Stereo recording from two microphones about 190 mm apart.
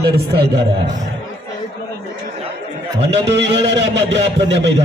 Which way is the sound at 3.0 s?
65° right (ahead or behind).